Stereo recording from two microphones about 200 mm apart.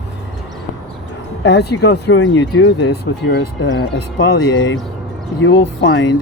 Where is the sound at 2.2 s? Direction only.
75° left (ahead or behind).